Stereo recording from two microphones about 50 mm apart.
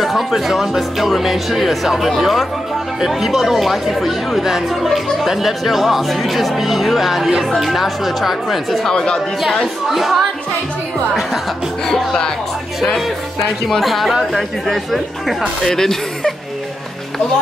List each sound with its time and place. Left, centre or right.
0.0 s speech: centre
8.9 s a woman's voice: centre
9.8 s speech: centre
12.8 s speech: centre